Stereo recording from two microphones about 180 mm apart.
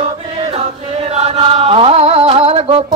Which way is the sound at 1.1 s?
35° right (ahead or behind).